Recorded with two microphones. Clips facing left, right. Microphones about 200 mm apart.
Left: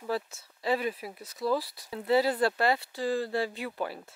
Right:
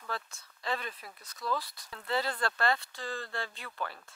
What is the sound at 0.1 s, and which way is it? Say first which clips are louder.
Speech: left 8 dB; 5° left (ahead or behind).